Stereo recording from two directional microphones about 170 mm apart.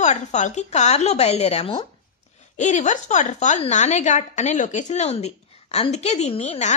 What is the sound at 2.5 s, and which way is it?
A woman's voice, 45° left (ahead or behind).